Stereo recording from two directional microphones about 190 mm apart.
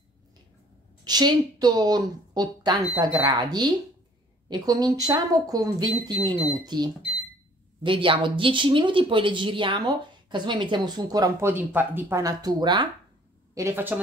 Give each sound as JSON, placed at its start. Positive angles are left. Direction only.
{"t": 1.0, "sound": "speech", "side_deg": -20}